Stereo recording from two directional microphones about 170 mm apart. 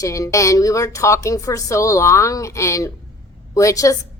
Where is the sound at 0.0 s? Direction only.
20° left (ahead or behind).